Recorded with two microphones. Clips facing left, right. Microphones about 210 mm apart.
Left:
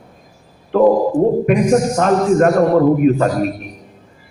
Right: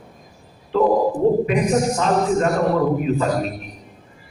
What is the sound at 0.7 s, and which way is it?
Speech, 55° left (ahead or behind).